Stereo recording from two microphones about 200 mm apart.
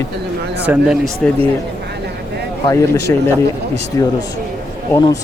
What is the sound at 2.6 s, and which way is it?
A man's voice, 15° left (ahead or behind).